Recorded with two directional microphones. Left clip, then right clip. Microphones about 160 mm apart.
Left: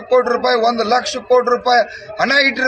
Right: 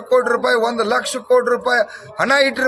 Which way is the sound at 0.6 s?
45° right (ahead or behind).